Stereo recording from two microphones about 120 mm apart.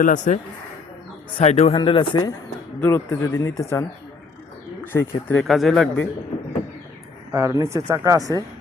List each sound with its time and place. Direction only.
0.0 s speech: 90° left
1.4 s a man's voice: 60° left (ahead or behind)
1.7 s speech: 45° left (ahead or behind)
2.8 s speech: 20° left (ahead or behind)
4.9 s speech: 20° left (ahead or behind)
5.4 s speech: centre (ahead or behind)
7.3 s speech: 25° right (ahead or behind)